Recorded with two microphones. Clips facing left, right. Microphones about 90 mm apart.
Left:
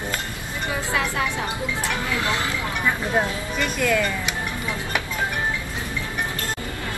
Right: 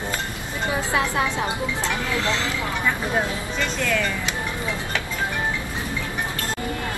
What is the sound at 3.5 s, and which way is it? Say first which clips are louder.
Speech: left 3 dB; 10° left (ahead or behind).